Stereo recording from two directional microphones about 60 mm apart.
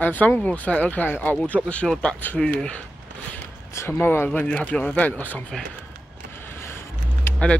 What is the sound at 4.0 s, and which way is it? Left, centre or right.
Speech, left.